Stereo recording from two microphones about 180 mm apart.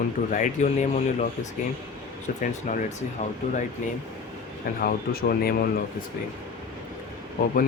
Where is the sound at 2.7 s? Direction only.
40° left (ahead or behind).